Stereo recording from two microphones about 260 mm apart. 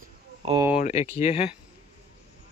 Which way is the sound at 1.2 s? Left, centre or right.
Left.